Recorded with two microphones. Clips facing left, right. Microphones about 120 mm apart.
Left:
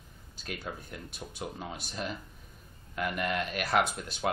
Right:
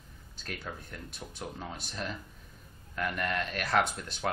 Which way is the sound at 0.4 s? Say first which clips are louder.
Left 2 dB; 10° left (ahead or behind).